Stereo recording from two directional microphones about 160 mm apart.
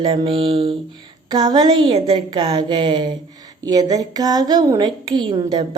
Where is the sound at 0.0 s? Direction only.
35° right (ahead or behind).